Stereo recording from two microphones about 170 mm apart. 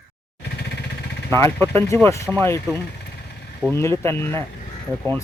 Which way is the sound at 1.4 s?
10° left (ahead or behind).